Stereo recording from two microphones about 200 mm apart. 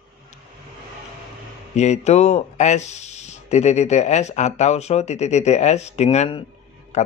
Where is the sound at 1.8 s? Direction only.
35° left (ahead or behind).